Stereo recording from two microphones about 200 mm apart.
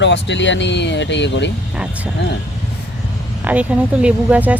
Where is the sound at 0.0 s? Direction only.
60° left (ahead or behind).